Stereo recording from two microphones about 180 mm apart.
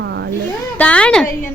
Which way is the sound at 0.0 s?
70° right (ahead or behind).